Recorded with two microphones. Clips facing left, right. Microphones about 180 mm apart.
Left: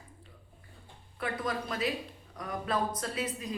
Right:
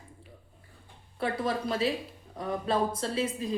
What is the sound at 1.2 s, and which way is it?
A woman's voice, 30° right (ahead or behind).